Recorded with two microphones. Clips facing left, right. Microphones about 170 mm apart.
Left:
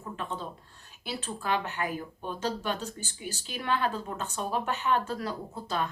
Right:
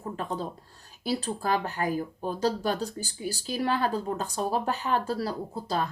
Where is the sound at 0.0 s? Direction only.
40° right (ahead or behind).